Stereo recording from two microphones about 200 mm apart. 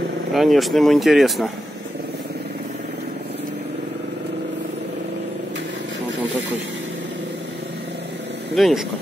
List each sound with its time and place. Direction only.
0.3 s speech: centre (ahead or behind)
6.1 s a sound: 65° right (ahead or behind)
8.5 s speech: centre (ahead or behind)